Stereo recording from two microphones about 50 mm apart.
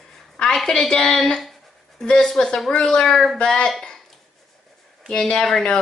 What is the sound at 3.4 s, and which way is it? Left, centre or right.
Speech, centre.